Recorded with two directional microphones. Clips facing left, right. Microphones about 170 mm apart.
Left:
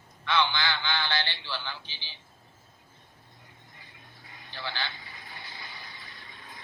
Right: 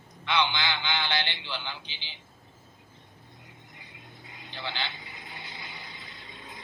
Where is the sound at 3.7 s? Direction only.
20° right (ahead or behind).